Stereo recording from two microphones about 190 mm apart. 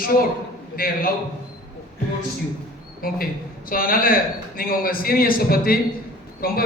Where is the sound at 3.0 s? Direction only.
50° left (ahead or behind).